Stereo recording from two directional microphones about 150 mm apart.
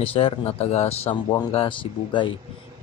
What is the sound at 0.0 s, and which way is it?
Speech, 40° left (ahead or behind).